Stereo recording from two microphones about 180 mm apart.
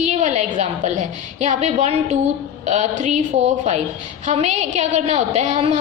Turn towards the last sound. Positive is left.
turn(degrees=-40)  # may be behind; listen again after turning